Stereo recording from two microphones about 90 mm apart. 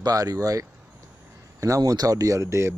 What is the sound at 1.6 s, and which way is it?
Speech, 40° right (ahead or behind).